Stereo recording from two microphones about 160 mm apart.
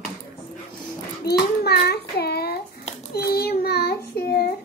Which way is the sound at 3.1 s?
80° left.